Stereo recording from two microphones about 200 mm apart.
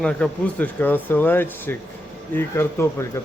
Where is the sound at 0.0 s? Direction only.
5° left (ahead or behind).